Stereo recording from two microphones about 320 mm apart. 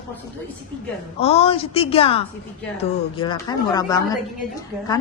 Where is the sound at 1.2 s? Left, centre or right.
Centre.